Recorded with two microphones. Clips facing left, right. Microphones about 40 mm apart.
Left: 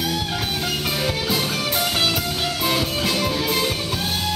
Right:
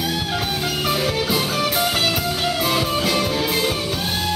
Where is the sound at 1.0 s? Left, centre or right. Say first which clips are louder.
Right 2 dB; centre.